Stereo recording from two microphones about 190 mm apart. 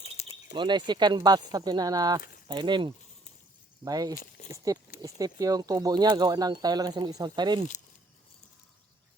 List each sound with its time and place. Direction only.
0.0 s bird: 35° left (ahead or behind)
0.5 s speech: 25° right (ahead or behind)